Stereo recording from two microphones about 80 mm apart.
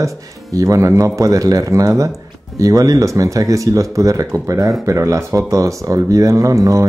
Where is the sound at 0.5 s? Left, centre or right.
Right.